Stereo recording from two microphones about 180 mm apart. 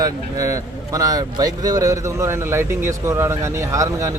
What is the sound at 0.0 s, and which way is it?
A man's voice, 20° right (ahead or behind).